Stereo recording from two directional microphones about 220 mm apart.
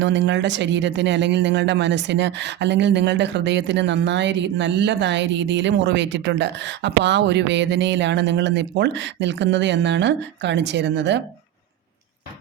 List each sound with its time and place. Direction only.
0.0 s speech: 55° right (ahead or behind)